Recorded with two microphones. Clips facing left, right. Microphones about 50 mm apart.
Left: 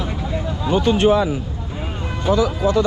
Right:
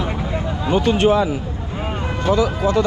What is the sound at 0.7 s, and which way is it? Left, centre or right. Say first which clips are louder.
Speech: even; right.